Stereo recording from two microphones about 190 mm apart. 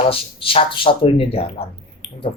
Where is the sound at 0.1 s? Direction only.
30° left (ahead or behind).